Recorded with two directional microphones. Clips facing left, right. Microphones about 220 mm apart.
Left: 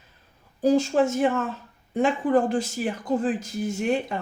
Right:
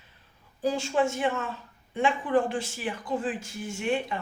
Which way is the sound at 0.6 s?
40° left (ahead or behind).